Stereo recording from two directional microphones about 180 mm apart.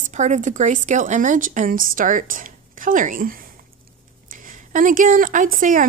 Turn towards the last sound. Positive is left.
turn(degrees=-45)  # may be behind; listen again after turning